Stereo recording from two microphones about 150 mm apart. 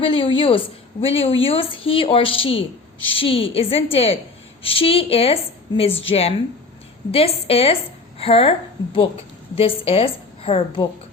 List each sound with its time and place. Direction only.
0.0 s a woman's voice: 35° left (ahead or behind)